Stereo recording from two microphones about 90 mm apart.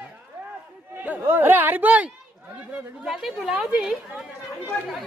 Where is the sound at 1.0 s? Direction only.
20° right (ahead or behind).